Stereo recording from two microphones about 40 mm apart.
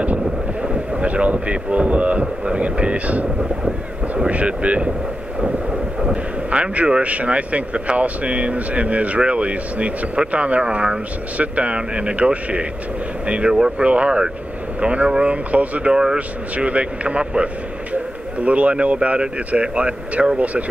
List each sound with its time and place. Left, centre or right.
0.0 s speech: right
15.9 s speech: centre
16.2 s speech: right